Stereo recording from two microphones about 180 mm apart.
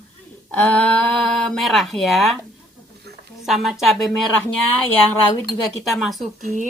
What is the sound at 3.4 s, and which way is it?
Speech, centre (ahead or behind).